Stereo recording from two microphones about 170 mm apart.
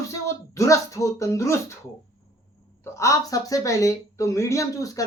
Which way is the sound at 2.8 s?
15° left (ahead or behind).